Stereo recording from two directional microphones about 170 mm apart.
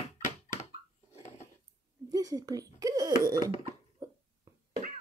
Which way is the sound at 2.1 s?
20° right (ahead or behind).